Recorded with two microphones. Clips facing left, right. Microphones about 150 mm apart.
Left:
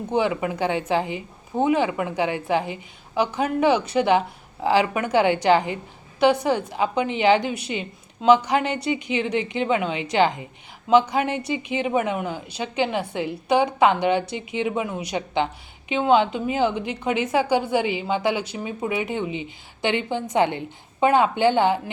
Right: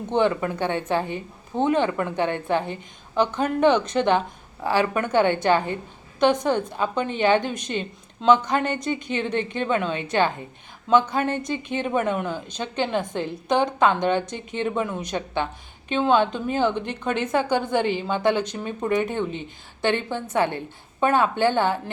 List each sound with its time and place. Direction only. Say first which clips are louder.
0.1 s a woman's voice: right 1 dB; 10° left (ahead or behind)